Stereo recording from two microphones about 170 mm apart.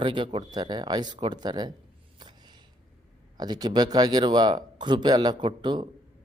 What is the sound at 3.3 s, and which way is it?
Speech, 25° right (ahead or behind).